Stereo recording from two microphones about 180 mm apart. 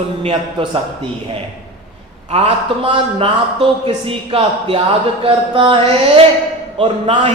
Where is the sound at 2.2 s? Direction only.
35° right (ahead or behind).